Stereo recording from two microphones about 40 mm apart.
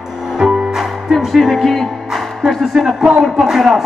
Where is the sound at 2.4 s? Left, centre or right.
Centre.